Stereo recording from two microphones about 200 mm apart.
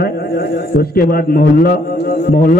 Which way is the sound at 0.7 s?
50° left (ahead or behind).